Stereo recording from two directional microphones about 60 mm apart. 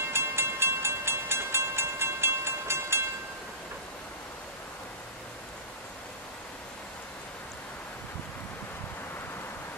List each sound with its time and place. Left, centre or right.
0.1 s train: right